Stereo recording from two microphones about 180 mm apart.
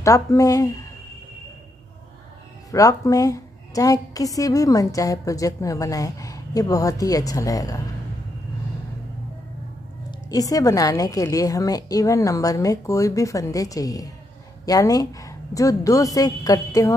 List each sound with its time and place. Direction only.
0.0 s speech: 15° left (ahead or behind)
2.7 s a woman's voice: 20° left (ahead or behind)
10.3 s a woman's voice: 20° left (ahead or behind)